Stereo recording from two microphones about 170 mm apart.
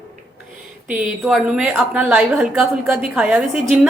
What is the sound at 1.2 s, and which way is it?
A woman's voice, centre (ahead or behind).